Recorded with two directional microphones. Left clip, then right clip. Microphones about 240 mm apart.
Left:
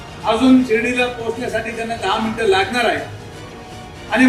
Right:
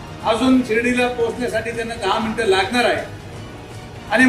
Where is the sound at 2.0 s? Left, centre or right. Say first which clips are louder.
Left 1 dB; right.